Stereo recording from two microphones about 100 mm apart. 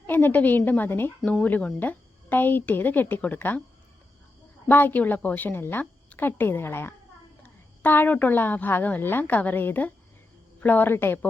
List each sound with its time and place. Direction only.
0.1 s speech: 20° left (ahead or behind)
4.6 s a woman's voice: 20° left (ahead or behind)